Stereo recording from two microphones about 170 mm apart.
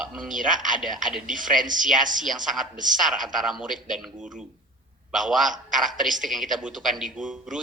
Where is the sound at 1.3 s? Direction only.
50° right (ahead or behind).